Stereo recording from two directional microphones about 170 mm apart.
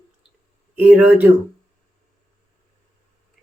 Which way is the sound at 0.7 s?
10° right (ahead or behind).